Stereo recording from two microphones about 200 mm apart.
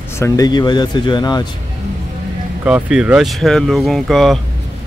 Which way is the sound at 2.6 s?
5° right (ahead or behind).